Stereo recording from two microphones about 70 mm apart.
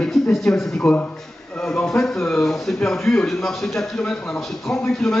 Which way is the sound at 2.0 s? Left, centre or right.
Centre.